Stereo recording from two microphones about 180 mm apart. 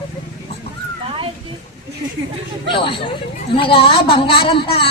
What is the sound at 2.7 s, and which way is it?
A woman's voice, 30° left (ahead or behind).